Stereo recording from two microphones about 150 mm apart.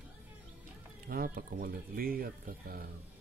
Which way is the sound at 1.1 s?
80° right.